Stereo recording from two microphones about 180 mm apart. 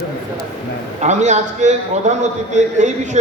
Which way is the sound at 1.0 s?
40° right (ahead or behind).